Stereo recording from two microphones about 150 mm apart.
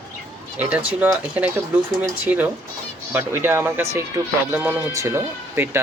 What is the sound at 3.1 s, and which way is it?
Speech, 15° right (ahead or behind).